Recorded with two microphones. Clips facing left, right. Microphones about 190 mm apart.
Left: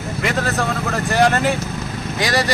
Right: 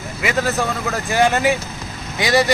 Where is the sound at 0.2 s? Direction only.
5° right (ahead or behind).